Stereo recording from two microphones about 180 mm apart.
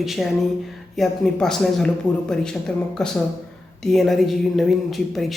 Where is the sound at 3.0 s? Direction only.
5° left (ahead or behind).